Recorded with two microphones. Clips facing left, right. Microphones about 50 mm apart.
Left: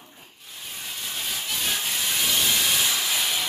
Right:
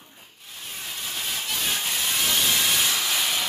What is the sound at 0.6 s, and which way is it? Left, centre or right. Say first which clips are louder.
Sawing: right 1 dB; centre.